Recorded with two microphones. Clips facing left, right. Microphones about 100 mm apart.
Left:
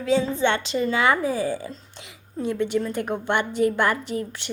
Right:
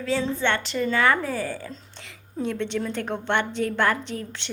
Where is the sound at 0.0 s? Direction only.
15° left (ahead or behind).